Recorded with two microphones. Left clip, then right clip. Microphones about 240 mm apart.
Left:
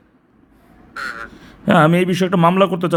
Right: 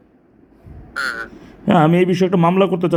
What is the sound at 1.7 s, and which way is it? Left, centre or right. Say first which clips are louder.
A man's voice: even; left.